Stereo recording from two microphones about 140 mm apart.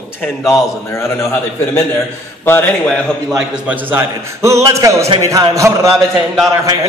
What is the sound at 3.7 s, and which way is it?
A man's voice, 15° right (ahead or behind).